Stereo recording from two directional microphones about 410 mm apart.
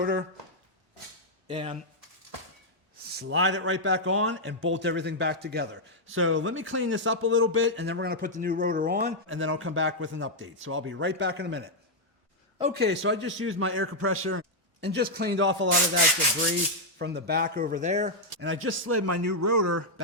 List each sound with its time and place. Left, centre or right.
1.5 s speech: centre
3.1 s a man's voice: right
9.3 s a man's voice: right
17.0 s a man's voice: right